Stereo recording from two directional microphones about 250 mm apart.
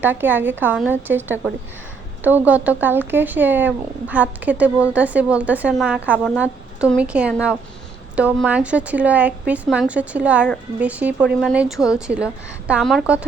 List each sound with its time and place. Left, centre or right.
0.0 s a woman's voice: centre